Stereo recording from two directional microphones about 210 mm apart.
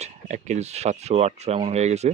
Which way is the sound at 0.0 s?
35° right (ahead or behind).